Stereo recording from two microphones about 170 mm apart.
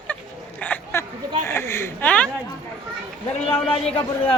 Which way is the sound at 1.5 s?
15° left (ahead or behind).